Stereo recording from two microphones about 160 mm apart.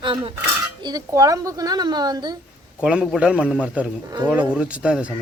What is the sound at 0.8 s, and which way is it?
Speech, 25° right (ahead or behind).